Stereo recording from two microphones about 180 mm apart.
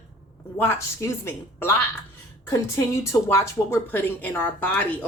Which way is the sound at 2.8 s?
15° left (ahead or behind).